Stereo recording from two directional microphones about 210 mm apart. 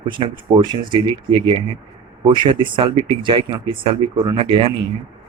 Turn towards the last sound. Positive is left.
turn(degrees=-25)  # may be behind; listen again after turning